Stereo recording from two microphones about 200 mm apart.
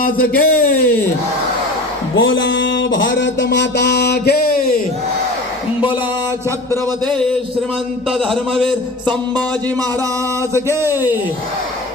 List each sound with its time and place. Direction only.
0.0 s speech: 45° left (ahead or behind)
2.1 s music: 70° left (ahead or behind); by 4.7 s 50° left (ahead or behind)
6.7 s a man's voice: 5° left (ahead or behind)
10.5 s speech: 15° right (ahead or behind)